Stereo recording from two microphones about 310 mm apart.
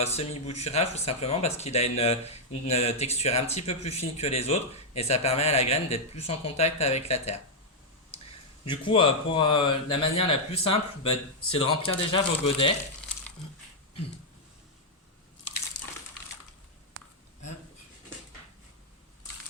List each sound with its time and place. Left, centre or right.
0.0 s speech: centre
8.6 s speech: centre